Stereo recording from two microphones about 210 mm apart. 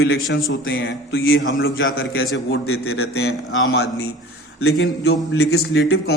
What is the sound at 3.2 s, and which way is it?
Speech, 55° left (ahead or behind).